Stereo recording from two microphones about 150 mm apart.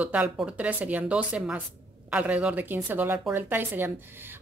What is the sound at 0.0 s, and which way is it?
A woman's voice, 10° right (ahead or behind).